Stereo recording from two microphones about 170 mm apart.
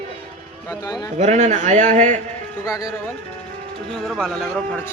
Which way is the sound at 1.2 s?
45° right (ahead or behind).